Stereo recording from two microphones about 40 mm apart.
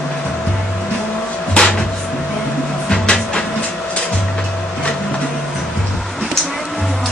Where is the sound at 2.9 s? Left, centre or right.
Left.